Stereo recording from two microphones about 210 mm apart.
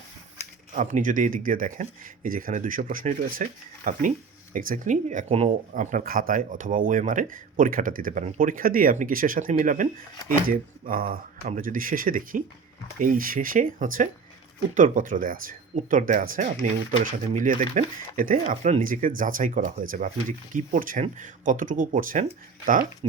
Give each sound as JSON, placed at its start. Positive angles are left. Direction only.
{"t": 0.7, "sound": "speech", "side_deg": -35}